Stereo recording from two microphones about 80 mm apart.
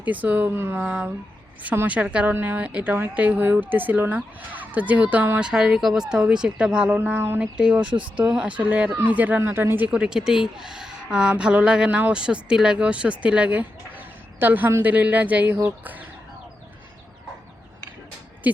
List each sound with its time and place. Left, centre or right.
0.0 s speech: right
0.8 s speech: centre
5.4 s speech: centre
6.9 s speech: right
7.5 s speech: centre
9.9 s speech: centre
18.5 s speech: right